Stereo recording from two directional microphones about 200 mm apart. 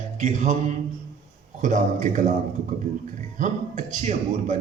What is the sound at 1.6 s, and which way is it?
Speech, 40° right (ahead or behind).